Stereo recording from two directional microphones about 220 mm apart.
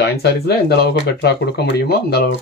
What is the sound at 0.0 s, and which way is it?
Speech, 45° left (ahead or behind).